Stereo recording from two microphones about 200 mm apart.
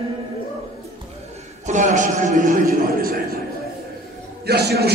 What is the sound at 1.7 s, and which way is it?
A man's voice, 35° right (ahead or behind).